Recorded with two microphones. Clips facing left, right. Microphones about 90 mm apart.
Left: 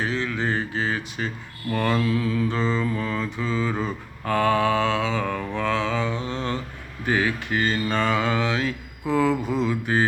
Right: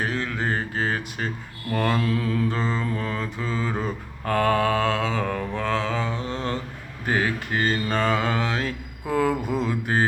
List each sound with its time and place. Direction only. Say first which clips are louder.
0.0 s speech: left 1 dB; 50° right (ahead or behind)
1.7 s mantra: left 1 dB; 40° right (ahead or behind)